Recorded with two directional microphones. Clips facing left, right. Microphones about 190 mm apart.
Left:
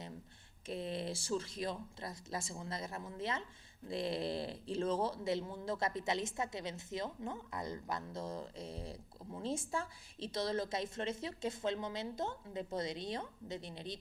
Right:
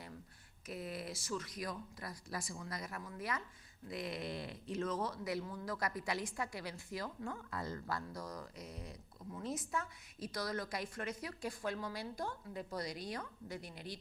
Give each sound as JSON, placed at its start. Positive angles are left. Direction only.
{"t": 0.7, "sound": "speech", "side_deg": 25}